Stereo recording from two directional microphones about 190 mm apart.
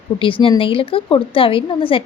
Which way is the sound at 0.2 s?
30° left (ahead or behind).